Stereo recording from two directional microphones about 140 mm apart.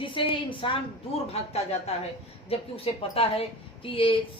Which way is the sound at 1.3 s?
50° left (ahead or behind).